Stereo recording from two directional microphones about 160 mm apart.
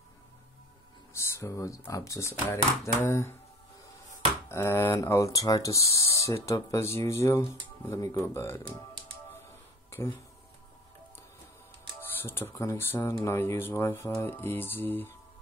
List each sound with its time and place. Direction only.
1.1 s speech: 20° left (ahead or behind)
4.5 s speech: 15° left (ahead or behind)
9.8 s a sound: 15° left (ahead or behind)
12.0 s speech: 15° left (ahead or behind)